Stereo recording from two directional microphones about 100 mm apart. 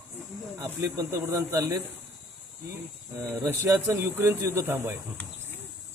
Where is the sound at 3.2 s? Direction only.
25° right (ahead or behind).